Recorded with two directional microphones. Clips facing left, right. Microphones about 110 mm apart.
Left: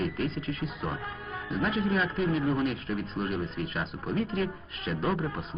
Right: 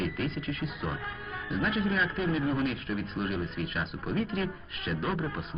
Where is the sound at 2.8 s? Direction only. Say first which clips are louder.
Left 1 dB; 35° left (ahead or behind).